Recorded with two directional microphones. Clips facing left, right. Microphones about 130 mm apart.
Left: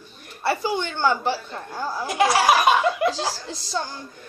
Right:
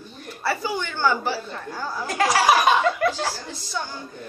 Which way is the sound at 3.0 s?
35° left (ahead or behind).